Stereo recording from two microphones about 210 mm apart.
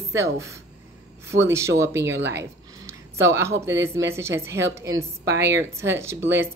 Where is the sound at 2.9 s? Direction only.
15° right (ahead or behind).